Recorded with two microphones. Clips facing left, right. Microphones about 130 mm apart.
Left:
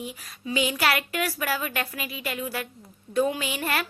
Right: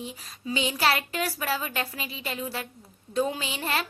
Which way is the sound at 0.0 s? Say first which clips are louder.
Left 1 dB; 30° right (ahead or behind).